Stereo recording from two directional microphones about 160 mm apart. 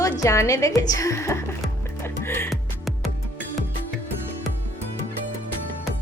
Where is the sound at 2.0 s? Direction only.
15° left (ahead or behind).